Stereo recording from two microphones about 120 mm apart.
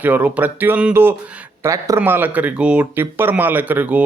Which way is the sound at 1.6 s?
25° right (ahead or behind).